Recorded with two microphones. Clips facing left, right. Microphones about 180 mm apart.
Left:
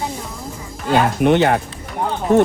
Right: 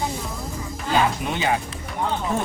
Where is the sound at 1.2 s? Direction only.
65° left (ahead or behind).